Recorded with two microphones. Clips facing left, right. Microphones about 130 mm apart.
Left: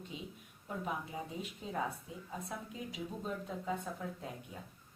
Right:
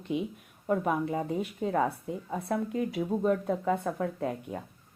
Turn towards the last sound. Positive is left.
turn(degrees=-65)  # may be behind; listen again after turning